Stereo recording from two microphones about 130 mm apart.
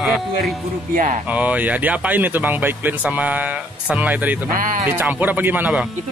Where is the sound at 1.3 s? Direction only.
10° right (ahead or behind).